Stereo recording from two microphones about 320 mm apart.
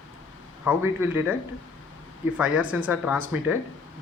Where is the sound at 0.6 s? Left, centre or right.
Centre.